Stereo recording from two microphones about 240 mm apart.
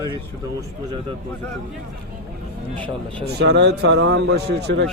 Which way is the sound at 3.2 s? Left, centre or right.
Right.